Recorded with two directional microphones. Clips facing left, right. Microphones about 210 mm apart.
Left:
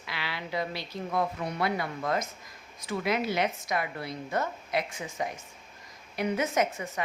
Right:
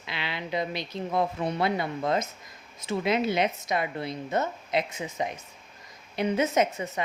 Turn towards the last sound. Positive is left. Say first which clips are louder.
# right 3 dB
turn(degrees=-20)  # may be behind; listen again after turning